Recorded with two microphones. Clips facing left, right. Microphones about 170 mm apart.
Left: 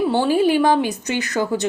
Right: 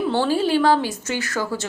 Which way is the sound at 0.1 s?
15° left (ahead or behind).